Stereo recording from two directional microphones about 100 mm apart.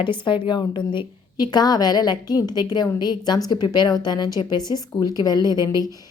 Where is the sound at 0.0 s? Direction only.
55° left (ahead or behind).